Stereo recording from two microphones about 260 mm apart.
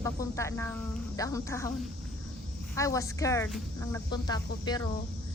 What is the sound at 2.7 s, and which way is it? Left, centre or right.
Speech, centre.